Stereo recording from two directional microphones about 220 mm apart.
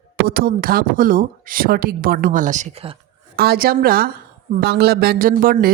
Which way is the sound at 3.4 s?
45° right (ahead or behind).